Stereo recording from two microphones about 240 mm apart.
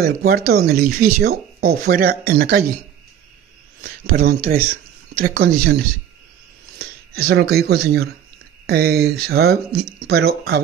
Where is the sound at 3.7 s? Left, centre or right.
Right.